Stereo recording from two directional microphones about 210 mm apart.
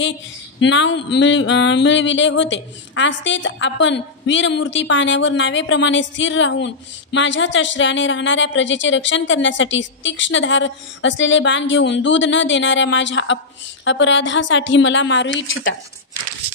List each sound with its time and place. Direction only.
0.0 s speech: 60° left (ahead or behind)